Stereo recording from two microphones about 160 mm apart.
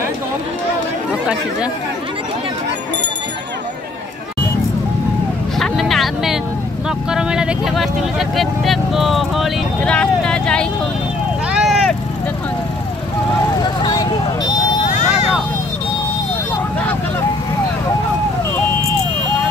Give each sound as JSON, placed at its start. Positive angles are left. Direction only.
{"t": 5.6, "sound": "vehicle", "side_deg": 0}
{"t": 7.1, "sound": "speech", "side_deg": -5}
{"t": 11.5, "sound": "vehicle", "side_deg": 0}
{"t": 13.6, "sound": "vehicle", "side_deg": 25}
{"t": 14.9, "sound": "vehicle", "side_deg": 45}